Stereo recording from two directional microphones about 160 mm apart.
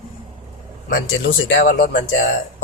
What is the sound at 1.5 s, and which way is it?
Speech, 75° left (ahead or behind).